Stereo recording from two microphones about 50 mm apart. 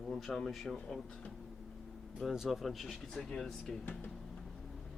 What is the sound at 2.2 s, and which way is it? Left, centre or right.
Speech, centre.